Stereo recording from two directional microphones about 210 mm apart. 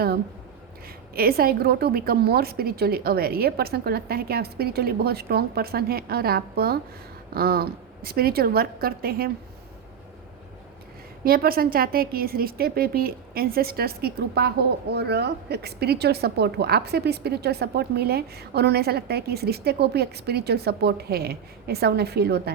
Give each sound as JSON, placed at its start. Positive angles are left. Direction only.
{"t": 1.1, "sound": "a woman's voice", "side_deg": -45}
{"t": 11.2, "sound": "a woman's voice", "side_deg": -45}